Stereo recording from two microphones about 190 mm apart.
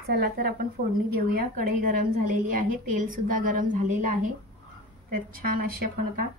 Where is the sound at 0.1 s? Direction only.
55° right (ahead or behind).